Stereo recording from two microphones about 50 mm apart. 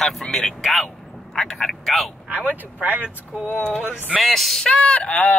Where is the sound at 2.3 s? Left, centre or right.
Right.